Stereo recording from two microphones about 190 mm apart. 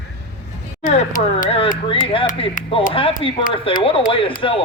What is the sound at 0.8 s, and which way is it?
Speech, 40° left (ahead or behind).